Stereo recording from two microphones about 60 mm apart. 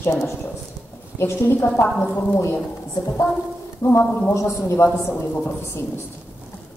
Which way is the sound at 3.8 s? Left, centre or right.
Left.